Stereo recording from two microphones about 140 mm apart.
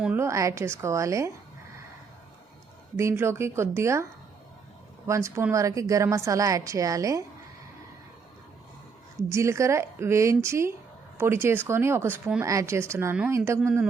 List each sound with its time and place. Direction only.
0.2 s a woman's voice: 20° right (ahead or behind)
2.9 s a woman's voice: 20° right (ahead or behind)
5.0 s a woman's voice: 20° right (ahead or behind)
9.3 s a woman's voice: 20° right (ahead or behind)